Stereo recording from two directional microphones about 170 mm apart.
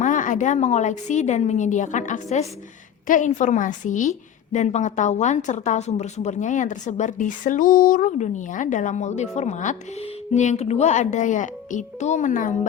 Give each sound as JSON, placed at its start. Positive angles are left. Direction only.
{"t": 0.0, "sound": "a woman's voice", "side_deg": 50}